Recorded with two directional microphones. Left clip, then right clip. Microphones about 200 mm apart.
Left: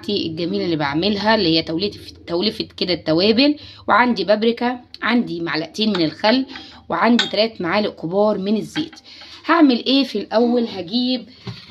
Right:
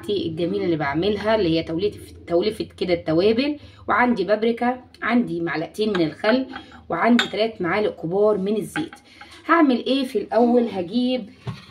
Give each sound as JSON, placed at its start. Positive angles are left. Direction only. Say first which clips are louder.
{"t": 0.0, "sound": "a woman's voice", "louder": "left 1 dB", "side_deg": 40}